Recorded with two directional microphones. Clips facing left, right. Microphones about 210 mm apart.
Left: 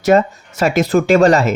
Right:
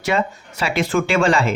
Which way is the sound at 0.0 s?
40° left (ahead or behind).